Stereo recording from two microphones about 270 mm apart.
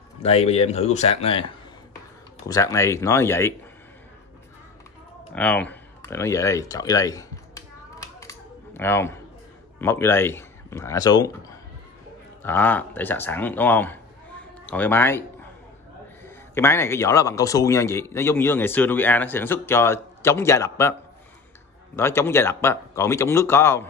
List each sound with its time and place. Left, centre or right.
0.2 s speech: left
2.4 s speech: centre
5.3 s a sound: centre
9.8 s a man's voice: centre
12.4 s speech: centre
16.5 s speech: centre
21.9 s speech: centre